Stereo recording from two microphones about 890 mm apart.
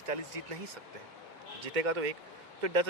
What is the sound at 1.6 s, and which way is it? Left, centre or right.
A man's voice, right.